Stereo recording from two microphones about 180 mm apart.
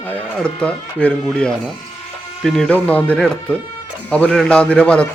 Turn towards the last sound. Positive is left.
turn(degrees=5)  # may be behind; listen again after turning